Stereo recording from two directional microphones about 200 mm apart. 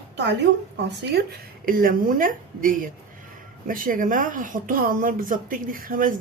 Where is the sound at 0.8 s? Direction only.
55° right (ahead or behind).